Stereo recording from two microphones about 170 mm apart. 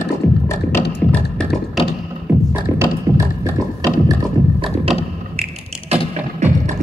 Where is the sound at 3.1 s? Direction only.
15° right (ahead or behind).